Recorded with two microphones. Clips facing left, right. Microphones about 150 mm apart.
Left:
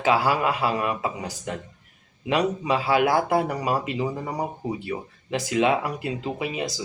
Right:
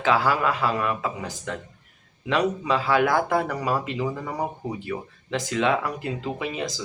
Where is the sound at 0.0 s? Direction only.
15° left (ahead or behind).